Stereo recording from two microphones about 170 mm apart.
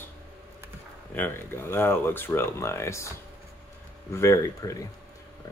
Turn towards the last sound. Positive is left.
turn(degrees=20)  # may be behind; listen again after turning